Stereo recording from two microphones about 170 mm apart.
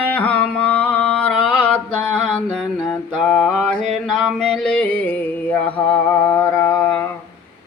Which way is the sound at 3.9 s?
Centre (ahead or behind).